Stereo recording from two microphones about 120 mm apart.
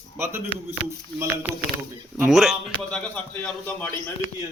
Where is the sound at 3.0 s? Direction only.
10° left (ahead or behind).